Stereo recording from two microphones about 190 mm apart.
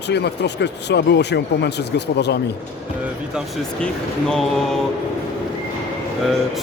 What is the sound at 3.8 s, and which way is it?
Speech, centre (ahead or behind).